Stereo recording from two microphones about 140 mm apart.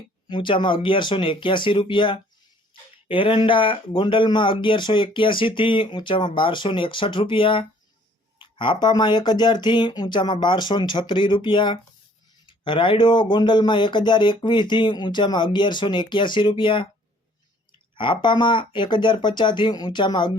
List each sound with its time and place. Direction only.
0.3 s speech: 35° left (ahead or behind)
17.9 s speech: 35° left (ahead or behind)